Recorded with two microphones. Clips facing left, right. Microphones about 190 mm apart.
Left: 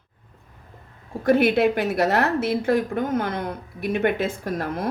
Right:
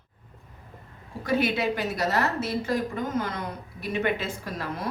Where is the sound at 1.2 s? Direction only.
55° left (ahead or behind).